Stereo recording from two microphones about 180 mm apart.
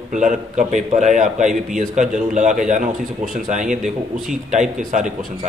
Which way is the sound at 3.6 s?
5° right (ahead or behind).